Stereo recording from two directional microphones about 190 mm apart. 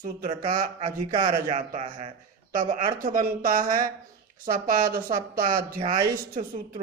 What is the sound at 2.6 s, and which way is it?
Speech, 45° right (ahead or behind).